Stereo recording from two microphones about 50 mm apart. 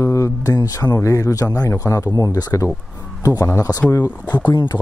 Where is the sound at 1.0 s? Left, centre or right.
Left.